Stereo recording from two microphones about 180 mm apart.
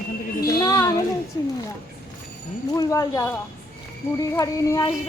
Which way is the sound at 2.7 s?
20° left (ahead or behind).